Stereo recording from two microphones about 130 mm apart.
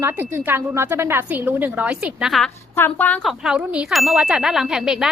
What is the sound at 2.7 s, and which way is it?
Speech, 15° left (ahead or behind).